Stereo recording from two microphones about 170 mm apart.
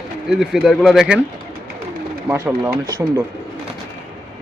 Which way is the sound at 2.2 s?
15° right (ahead or behind).